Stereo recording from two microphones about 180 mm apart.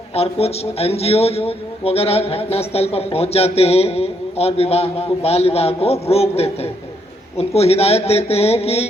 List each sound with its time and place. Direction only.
0.1 s a man's voice: 35° left (ahead or behind)